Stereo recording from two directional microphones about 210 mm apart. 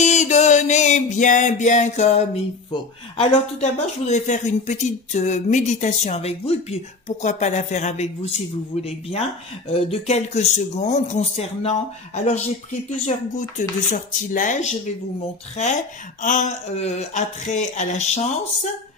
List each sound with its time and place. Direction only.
0.0 s music: 35° left (ahead or behind)
8.7 s speech: 30° left (ahead or behind)
9.7 s music: 25° left (ahead or behind)